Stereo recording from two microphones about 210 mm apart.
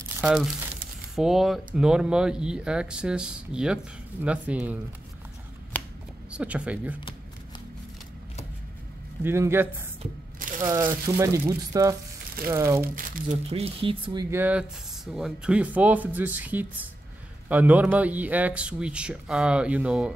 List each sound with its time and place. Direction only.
0.2 s speech: 5° right (ahead or behind)
5.7 s shuffling cards: 10° left (ahead or behind)
6.3 s speech: 5° right (ahead or behind)
9.2 s speech: 10° right (ahead or behind)
12.9 s speech: 40° right (ahead or behind)
13.5 s speech: 30° right (ahead or behind)
14.3 s speech: 5° right (ahead or behind)